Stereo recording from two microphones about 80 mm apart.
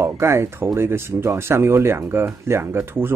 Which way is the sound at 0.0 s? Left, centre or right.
Right.